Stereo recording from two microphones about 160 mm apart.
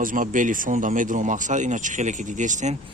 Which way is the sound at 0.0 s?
55° right (ahead or behind).